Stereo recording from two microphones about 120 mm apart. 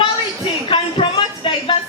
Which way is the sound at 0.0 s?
45° left (ahead or behind).